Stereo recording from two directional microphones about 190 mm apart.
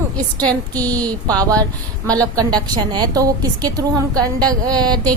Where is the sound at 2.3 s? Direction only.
20° right (ahead or behind).